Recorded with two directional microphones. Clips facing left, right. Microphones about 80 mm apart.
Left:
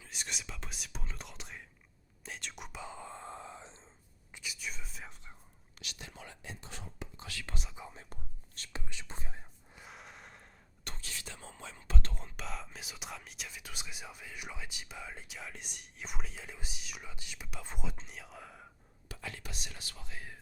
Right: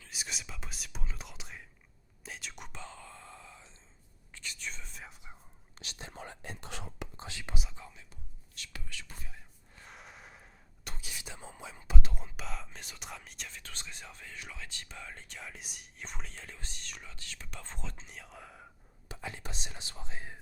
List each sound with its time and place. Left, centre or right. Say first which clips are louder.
0.1 s speech: even; centre
2.2 s whispering: even; centre; by 3.8 s left
4.3 s whispering: even; centre
5.8 s speech: right 3 dB; right
6.6 s speech: right 4 dB; right
7.2 s speech: right 1 dB; right
7.5 s speech: right 1 dB; centre
8.1 s whispering: left 3 dB; left
8.7 s speech: left 3 dB; left
9.7 s speech: even; centre
19.0 s speech: right 2 dB; right